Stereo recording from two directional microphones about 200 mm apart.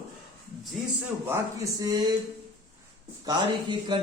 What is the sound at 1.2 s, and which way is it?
Speech, 15° right (ahead or behind).